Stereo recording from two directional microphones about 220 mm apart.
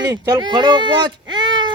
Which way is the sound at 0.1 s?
20° right (ahead or behind).